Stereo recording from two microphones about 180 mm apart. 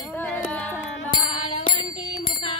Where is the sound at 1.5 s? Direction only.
30° left (ahead or behind).